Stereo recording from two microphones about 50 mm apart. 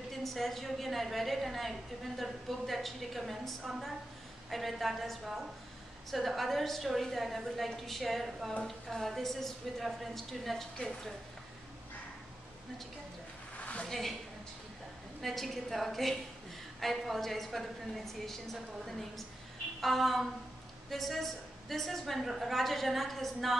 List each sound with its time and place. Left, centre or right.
0.1 s a woman's voice: centre
13.6 s a sound: left
13.8 s a woman's voice: centre
15.2 s a woman's voice: centre